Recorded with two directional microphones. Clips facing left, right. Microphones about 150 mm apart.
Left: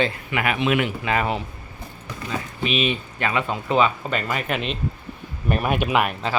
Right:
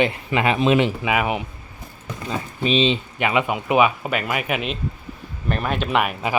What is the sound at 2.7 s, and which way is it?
Speech, 25° right (ahead or behind).